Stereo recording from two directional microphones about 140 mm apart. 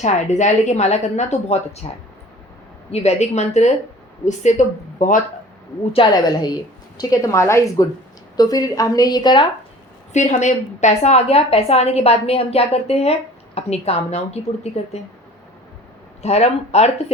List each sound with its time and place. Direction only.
0.0 s a woman's voice: 55° left (ahead or behind)
2.9 s a woman's voice: 50° left (ahead or behind); by 5.2 s 65° left (ahead or behind)
6.1 s a woman's voice: 30° left (ahead or behind)
10.1 s a woman's voice: 55° left (ahead or behind)
16.2 s a woman's voice: 50° left (ahead or behind)